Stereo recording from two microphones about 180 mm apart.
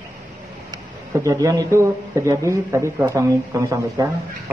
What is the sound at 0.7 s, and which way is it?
Speech, 20° right (ahead or behind).